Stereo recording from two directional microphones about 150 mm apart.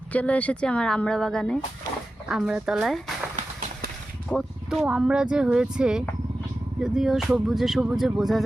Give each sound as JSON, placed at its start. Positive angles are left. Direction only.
{"t": 0.1, "sound": "speech", "side_deg": 10}
{"t": 4.3, "sound": "speech", "side_deg": 0}